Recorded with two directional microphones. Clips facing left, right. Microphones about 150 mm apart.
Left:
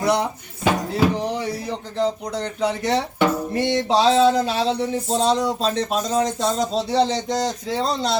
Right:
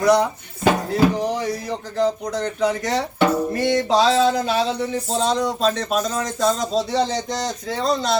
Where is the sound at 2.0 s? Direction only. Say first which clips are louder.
Right 2 dB; 30° left (ahead or behind).